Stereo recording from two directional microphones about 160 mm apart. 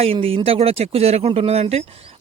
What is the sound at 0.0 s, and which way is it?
A man's voice, 35° right (ahead or behind).